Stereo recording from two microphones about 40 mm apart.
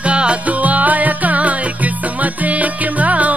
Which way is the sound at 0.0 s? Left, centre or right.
Right.